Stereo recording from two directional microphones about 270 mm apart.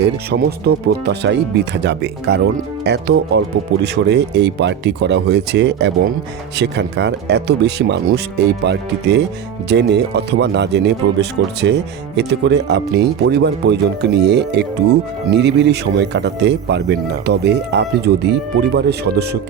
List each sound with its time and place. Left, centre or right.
0.0 s speech: right